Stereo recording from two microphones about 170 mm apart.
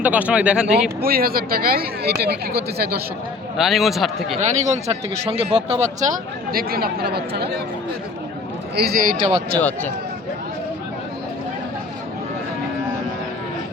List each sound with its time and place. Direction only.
0.0 s speech: 10° right (ahead or behind)
1.0 s speech: 60° right (ahead or behind)
3.6 s speech: centre (ahead or behind)
4.4 s speech: 45° right (ahead or behind)
6.5 s speech: 60° right (ahead or behind)
8.7 s speech: 65° right (ahead or behind)
9.6 s speech: 10° left (ahead or behind)